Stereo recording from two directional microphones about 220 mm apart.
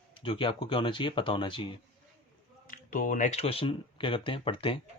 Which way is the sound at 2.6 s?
40° left (ahead or behind).